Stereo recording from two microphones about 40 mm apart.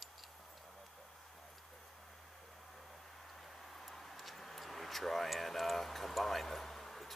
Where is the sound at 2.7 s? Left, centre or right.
Centre.